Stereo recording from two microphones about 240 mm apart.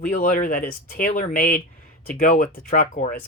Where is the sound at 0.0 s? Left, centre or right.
Left.